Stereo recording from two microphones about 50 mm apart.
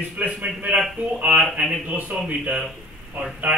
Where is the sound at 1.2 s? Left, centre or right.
Right.